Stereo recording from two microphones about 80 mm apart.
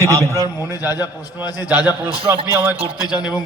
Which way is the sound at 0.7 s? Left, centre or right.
Left.